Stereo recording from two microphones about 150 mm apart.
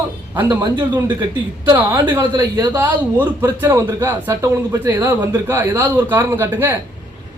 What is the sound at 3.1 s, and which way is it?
A man's voice, 15° right (ahead or behind).